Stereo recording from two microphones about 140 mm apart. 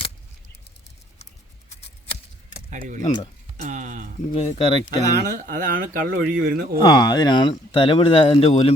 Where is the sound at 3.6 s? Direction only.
65° right (ahead or behind).